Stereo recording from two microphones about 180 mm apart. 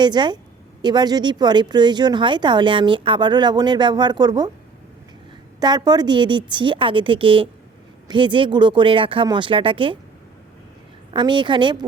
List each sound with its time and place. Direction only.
0.0 s speech: 25° right (ahead or behind)
5.5 s speech: 25° right (ahead or behind)
11.1 s speech: 25° right (ahead or behind)